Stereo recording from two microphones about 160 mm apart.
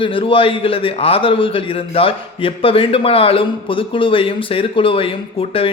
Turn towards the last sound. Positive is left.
turn(degrees=35)  # may be behind; listen again after turning